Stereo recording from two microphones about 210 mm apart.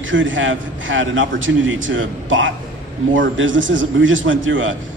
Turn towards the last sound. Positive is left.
turn(degrees=-65)  # may be behind; listen again after turning